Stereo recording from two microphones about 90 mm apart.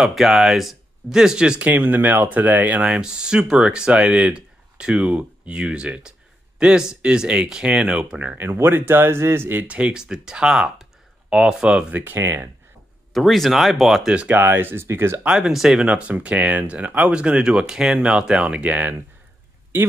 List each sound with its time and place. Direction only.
0.0 s speech: 5° right (ahead or behind)
8.4 s speech: 25° right (ahead or behind)
12.0 s speech: 25° right (ahead or behind)
13.1 s speech: centre (ahead or behind)
14.1 s speech: 20° right (ahead or behind)
15.2 s speech: 5° right (ahead or behind)